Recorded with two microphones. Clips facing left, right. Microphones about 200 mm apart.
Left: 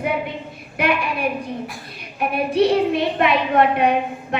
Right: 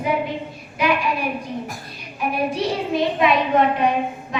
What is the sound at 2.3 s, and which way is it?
A woman's voice, 60° left (ahead or behind).